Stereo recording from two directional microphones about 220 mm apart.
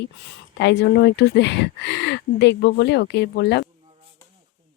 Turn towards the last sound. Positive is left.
turn(degrees=50)  # may be behind; listen again after turning